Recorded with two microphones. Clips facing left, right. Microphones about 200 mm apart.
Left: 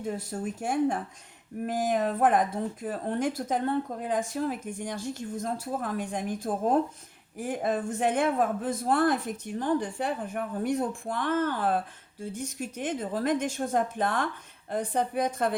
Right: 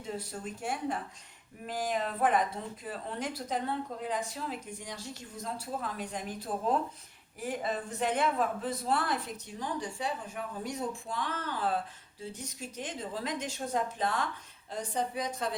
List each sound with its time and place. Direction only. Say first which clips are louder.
0.0 s a woman's voice: left 6 dB; 50° left (ahead or behind)